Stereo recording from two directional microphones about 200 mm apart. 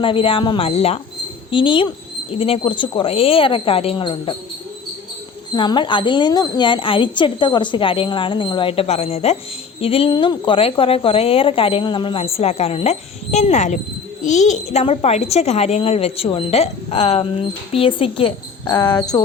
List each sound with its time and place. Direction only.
0.0 s a woman's voice: 25° left (ahead or behind)
5.5 s a woman's voice: 25° left (ahead or behind)